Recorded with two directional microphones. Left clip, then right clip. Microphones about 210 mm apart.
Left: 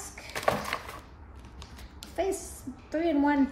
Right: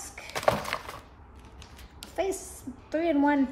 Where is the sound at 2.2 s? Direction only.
15° right (ahead or behind).